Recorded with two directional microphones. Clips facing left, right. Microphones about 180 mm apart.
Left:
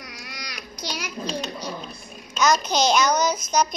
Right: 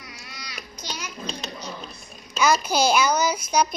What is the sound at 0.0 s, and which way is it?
Child singing, 75° left (ahead or behind).